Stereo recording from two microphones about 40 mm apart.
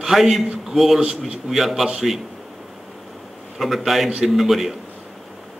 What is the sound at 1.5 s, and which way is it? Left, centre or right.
Speech, centre.